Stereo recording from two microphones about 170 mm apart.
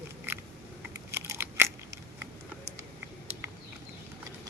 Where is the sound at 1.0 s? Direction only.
15° right (ahead or behind).